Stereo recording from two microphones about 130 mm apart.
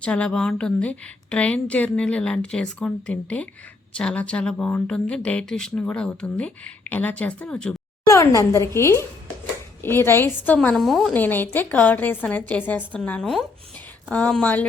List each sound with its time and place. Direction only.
0.0 s speech: 10° left (ahead or behind)
8.0 s speech: 25° left (ahead or behind)
10.8 s a woman's voice: centre (ahead or behind)
11.1 s speech: 15° left (ahead or behind)